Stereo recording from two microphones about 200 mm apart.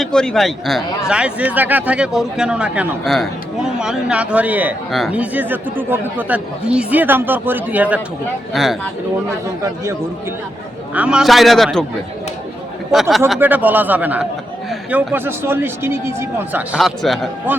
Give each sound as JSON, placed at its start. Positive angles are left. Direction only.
{"t": 0.0, "sound": "a man's voice", "side_deg": 5}
{"t": 10.9, "sound": "a man's voice", "side_deg": -5}
{"t": 12.9, "sound": "speech", "side_deg": 0}
{"t": 16.7, "sound": "a man's voice", "side_deg": 0}